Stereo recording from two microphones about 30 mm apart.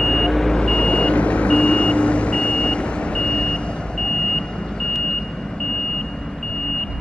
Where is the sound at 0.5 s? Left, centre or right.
Left.